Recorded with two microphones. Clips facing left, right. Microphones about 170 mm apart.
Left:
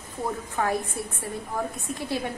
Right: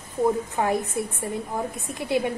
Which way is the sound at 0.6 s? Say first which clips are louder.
Even; 20° right (ahead or behind).